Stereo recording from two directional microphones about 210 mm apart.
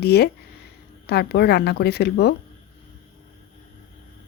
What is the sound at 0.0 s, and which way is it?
Speech, 50° left (ahead or behind).